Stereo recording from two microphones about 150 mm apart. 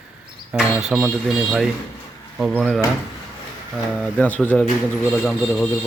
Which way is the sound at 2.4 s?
5° right (ahead or behind).